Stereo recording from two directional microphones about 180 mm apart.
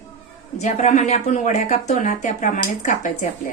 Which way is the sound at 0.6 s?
40° left (ahead or behind).